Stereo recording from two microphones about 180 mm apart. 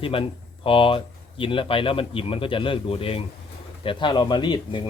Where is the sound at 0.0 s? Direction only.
30° left (ahead or behind).